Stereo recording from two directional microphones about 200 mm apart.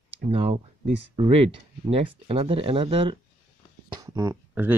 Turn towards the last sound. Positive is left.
turn(degrees=-10)  # may be behind; listen again after turning